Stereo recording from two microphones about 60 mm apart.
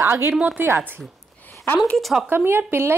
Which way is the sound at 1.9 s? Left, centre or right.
Centre.